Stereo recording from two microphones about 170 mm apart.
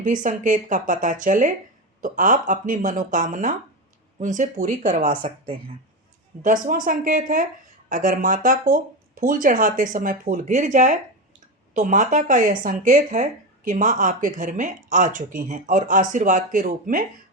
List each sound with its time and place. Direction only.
0.0 s speech: 50° right (ahead or behind)
6.4 s speech: 50° right (ahead or behind)